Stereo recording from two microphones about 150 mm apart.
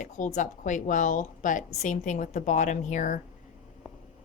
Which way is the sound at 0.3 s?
55° left (ahead or behind).